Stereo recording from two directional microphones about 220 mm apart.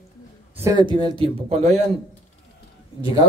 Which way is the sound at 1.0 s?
25° right (ahead or behind).